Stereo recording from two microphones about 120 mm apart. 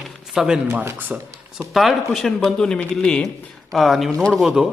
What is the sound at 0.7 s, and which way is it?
Speech, 15° right (ahead or behind).